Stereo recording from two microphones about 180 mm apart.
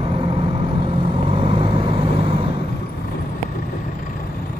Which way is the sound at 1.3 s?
30° right (ahead or behind).